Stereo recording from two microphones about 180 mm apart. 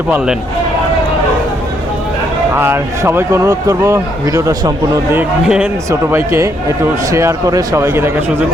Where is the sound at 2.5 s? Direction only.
15° right (ahead or behind).